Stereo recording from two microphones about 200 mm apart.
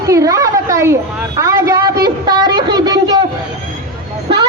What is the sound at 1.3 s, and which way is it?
Speech, 15° right (ahead or behind).